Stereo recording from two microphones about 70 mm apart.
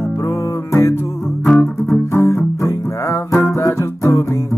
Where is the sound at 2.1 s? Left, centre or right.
Left.